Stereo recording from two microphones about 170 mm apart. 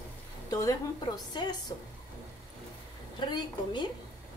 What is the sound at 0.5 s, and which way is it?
A woman's voice, 20° left (ahead or behind).